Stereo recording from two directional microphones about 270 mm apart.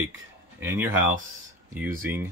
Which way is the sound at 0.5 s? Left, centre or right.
Centre.